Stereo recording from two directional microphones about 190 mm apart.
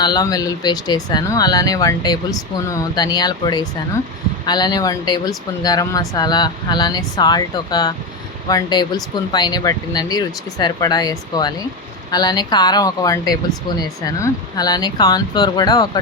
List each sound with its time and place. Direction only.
0.0 s speech: 20° left (ahead or behind)